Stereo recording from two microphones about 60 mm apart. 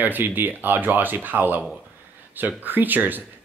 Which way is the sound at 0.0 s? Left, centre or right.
Right.